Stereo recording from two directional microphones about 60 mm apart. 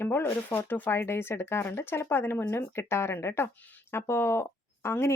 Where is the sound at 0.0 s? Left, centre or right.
Left.